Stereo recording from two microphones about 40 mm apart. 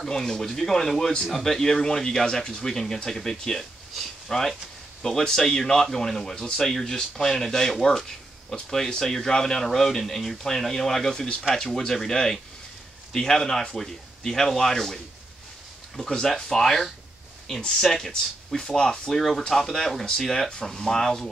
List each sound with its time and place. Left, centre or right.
0.0 s speech: centre
16.1 s speech: centre